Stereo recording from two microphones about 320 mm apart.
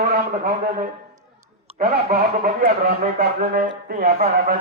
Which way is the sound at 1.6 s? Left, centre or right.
Right.